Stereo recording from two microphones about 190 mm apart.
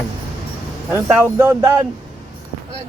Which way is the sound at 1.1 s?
10° right (ahead or behind).